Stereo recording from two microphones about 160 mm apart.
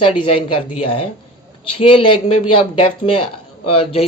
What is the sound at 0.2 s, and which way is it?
Speech, 35° left (ahead or behind).